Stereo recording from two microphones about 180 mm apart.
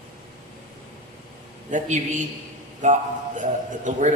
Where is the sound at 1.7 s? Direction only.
45° right (ahead or behind).